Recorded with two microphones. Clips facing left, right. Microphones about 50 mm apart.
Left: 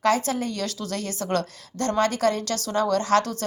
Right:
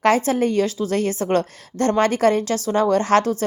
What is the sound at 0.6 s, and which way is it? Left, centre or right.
A woman's voice, right.